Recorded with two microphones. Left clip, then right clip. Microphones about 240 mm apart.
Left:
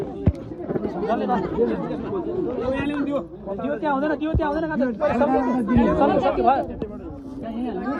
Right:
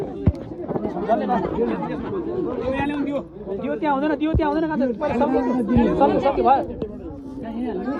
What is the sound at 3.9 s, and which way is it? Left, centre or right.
Speech, centre.